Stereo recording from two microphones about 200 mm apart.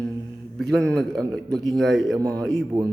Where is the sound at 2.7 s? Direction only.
20° right (ahead or behind).